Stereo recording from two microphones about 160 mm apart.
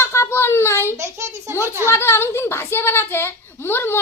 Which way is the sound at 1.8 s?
15° left (ahead or behind).